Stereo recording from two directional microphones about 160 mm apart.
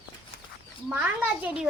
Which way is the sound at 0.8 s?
10° right (ahead or behind).